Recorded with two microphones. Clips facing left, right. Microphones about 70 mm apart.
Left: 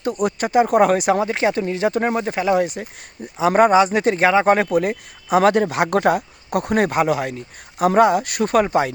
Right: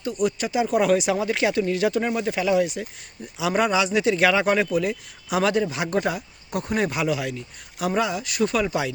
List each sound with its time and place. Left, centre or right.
0.0 s speech: left
1.2 s speech: left
1.9 s speech: left
4.5 s speech: left